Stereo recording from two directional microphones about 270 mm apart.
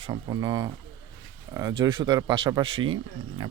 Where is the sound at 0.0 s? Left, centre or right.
Centre.